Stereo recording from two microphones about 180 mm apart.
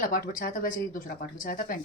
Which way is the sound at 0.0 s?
50° left (ahead or behind).